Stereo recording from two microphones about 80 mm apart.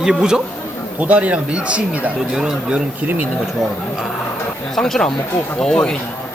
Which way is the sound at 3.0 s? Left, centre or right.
Right.